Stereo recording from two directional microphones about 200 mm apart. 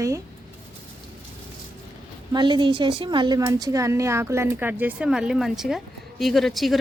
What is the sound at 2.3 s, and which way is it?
A woman's voice, 25° right (ahead or behind).